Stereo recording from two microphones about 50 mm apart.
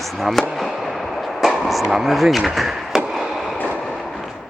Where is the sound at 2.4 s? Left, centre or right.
Centre.